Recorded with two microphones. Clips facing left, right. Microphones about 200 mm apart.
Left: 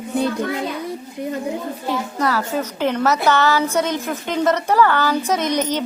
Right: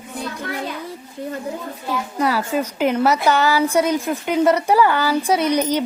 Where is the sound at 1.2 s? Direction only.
15° left (ahead or behind).